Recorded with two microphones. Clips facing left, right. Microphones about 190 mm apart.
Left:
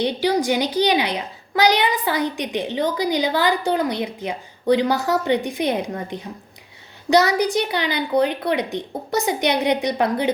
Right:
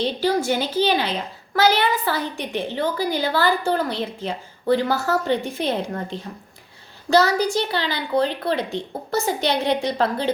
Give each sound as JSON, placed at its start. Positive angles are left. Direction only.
{"t": 0.0, "sound": "a child's voice", "side_deg": 15}